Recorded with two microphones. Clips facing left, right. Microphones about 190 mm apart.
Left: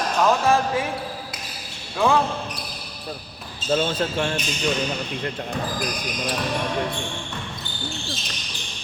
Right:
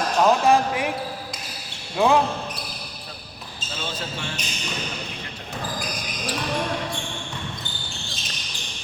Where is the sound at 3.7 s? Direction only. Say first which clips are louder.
Left 10 dB; 55° left (ahead or behind).